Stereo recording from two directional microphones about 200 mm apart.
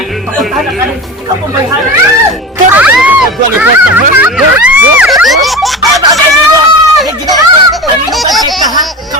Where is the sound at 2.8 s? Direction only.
5° right (ahead or behind).